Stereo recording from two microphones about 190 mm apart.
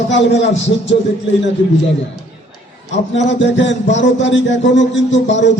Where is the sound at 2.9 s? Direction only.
70° left (ahead or behind).